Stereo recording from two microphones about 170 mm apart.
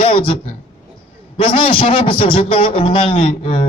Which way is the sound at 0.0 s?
30° left (ahead or behind).